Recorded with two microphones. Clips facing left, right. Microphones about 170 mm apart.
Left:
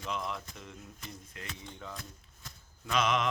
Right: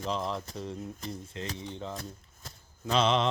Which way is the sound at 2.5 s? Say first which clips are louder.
Right 6 dB; 30° right (ahead or behind).